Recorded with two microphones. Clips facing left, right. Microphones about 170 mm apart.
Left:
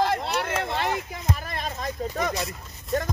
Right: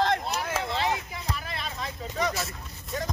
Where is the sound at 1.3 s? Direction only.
45° left (ahead or behind).